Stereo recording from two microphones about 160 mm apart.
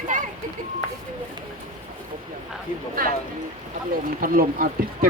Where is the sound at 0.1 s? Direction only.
55° right (ahead or behind).